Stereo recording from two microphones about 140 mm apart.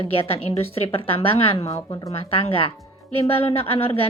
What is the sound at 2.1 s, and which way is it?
Speech, 45° left (ahead or behind).